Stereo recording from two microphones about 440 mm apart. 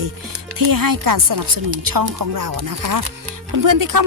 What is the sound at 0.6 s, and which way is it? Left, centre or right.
Speech, right.